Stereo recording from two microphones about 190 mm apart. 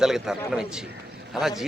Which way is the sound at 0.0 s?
5° right (ahead or behind).